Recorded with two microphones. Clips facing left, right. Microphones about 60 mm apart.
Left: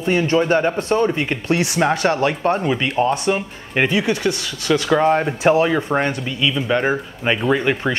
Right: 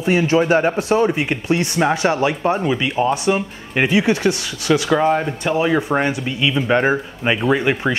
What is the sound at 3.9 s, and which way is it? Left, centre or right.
Speech, right.